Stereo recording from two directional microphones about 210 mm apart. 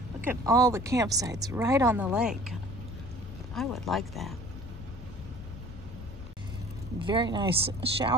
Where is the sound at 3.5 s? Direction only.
Centre (ahead or behind).